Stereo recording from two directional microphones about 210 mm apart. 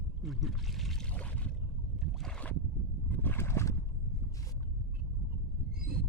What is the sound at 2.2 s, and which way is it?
Boat, 5° left (ahead or behind).